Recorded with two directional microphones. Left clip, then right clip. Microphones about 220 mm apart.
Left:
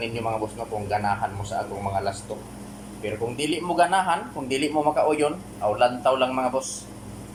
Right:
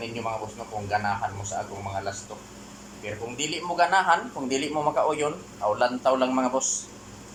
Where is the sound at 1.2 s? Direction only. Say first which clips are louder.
Left 2 dB; 10° left (ahead or behind).